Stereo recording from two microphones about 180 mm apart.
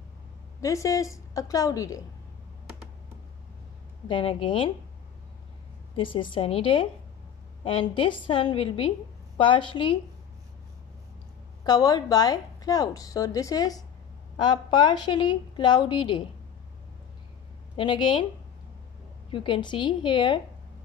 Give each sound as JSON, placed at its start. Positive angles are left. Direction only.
{"t": 0.6, "sound": "a woman's voice", "side_deg": 20}
{"t": 4.1, "sound": "a woman's voice", "side_deg": 30}
{"t": 5.9, "sound": "a woman's voice", "side_deg": 30}
{"t": 11.6, "sound": "a woman's voice", "side_deg": 20}
{"t": 17.7, "sound": "a woman's voice", "side_deg": 25}
{"t": 19.3, "sound": "a woman's voice", "side_deg": 25}